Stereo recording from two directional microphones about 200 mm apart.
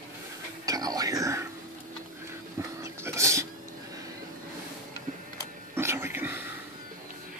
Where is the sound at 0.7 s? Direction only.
20° right (ahead or behind).